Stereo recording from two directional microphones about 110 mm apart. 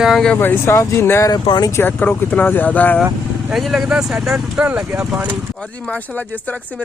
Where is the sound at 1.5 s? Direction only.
40° left (ahead or behind).